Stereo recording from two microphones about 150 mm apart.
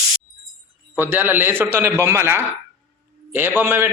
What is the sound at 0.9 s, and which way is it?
A man's voice, 15° right (ahead or behind).